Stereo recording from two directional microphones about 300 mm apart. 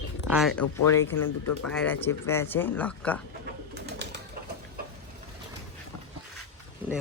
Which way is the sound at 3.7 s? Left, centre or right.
Right.